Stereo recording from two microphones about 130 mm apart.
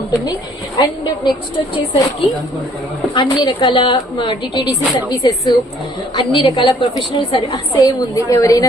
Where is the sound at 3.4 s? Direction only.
35° left (ahead or behind).